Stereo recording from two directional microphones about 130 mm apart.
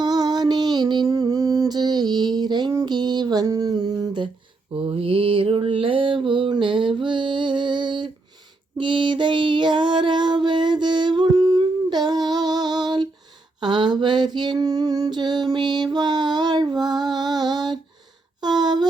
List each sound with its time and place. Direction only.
0.0 s music: 30° right (ahead or behind)
4.7 s mantra: 45° right (ahead or behind)
8.8 s music: 40° right (ahead or behind)
13.6 s female singing: 35° right (ahead or behind)
18.4 s a sound: 35° right (ahead or behind)